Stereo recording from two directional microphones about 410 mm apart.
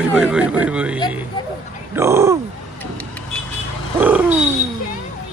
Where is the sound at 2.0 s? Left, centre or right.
Centre.